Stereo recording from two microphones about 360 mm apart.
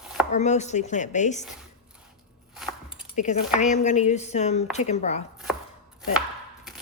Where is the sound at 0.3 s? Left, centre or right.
Centre.